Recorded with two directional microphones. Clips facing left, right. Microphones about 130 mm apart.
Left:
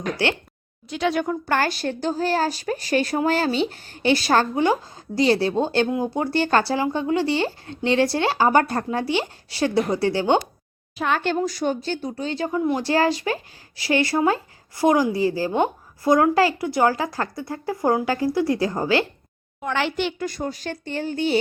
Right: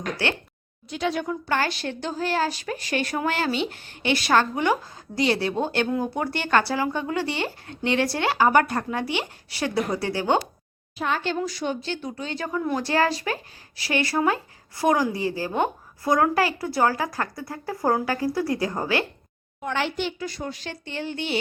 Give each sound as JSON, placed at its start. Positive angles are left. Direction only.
{"t": 0.9, "sound": "a woman's voice", "side_deg": 80}
{"t": 10.9, "sound": "a woman's voice", "side_deg": 70}
{"t": 11.3, "sound": "speech", "side_deg": 40}
{"t": 12.5, "sound": "a woman's voice", "side_deg": 20}
{"t": 19.6, "sound": "a woman's voice", "side_deg": 90}
{"t": 20.1, "sound": "speech", "side_deg": 45}